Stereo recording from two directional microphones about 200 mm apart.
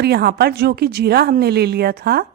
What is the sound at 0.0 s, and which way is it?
A woman's voice, 55° right (ahead or behind).